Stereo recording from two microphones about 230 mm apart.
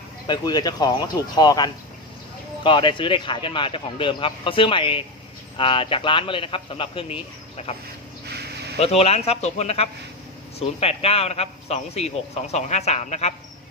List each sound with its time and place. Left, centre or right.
0.3 s a man's voice: centre
8.8 s a man's voice: left